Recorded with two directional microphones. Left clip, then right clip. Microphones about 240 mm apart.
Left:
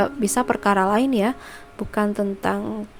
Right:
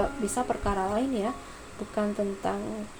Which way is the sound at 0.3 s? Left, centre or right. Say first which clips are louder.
Left 11 dB; left.